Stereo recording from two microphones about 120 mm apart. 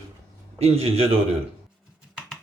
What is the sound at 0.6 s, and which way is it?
Speech, 60° right (ahead or behind).